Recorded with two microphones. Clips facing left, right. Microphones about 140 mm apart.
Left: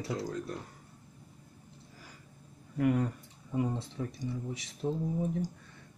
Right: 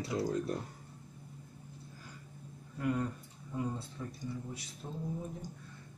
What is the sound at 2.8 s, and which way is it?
Speech, 75° left (ahead or behind).